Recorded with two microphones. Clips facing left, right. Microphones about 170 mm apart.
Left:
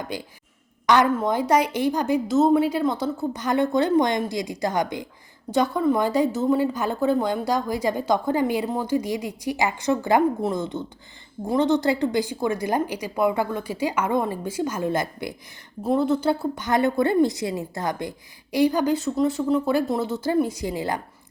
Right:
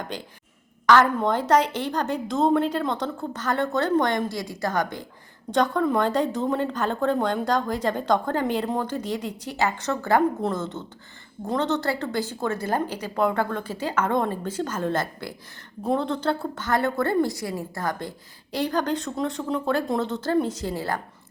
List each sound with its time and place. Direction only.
0.1 s a woman's voice: 10° left (ahead or behind)